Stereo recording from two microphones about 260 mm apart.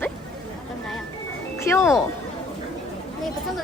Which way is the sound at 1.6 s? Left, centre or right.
Centre.